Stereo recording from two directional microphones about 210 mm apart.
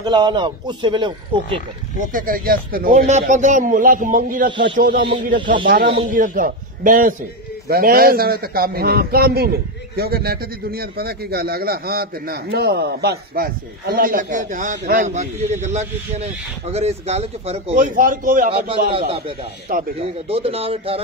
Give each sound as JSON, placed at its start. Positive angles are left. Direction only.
{"t": 0.0, "sound": "a man's voice", "side_deg": -20}
{"t": 2.0, "sound": "a man's voice", "side_deg": -40}
{"t": 5.4, "sound": "a man's voice", "side_deg": -20}
{"t": 5.7, "sound": "a man's voice", "side_deg": -50}
{"t": 18.9, "sound": "a man's voice", "side_deg": -25}